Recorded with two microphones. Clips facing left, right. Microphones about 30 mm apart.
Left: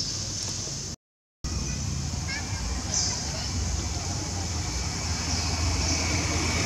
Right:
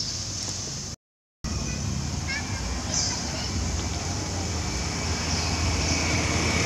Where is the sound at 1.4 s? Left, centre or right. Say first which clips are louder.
Right 2 dB; centre; by 6.6 s right.